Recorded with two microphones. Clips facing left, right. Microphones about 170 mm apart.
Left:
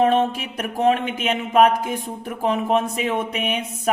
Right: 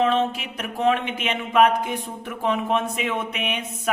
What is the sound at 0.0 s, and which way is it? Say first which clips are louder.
Speech: left 3 dB; 50° left (ahead or behind).